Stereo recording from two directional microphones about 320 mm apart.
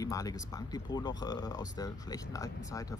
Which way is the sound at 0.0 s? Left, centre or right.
Centre.